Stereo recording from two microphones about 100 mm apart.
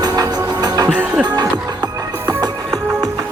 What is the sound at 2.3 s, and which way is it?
Music, 40° right (ahead or behind).